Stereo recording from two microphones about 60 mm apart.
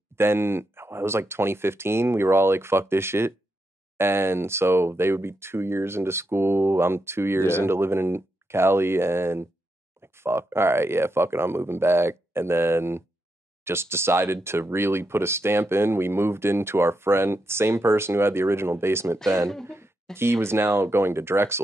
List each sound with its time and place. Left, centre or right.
0.1 s speech: right
19.2 s speech: right
19.6 s speech: right